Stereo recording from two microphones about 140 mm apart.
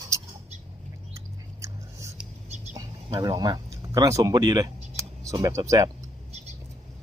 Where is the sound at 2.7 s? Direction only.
30° right (ahead or behind).